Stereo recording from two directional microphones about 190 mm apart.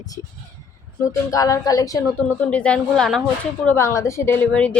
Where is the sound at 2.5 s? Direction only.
5° left (ahead or behind).